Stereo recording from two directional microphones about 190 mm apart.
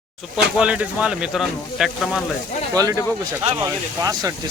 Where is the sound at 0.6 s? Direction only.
5° right (ahead or behind).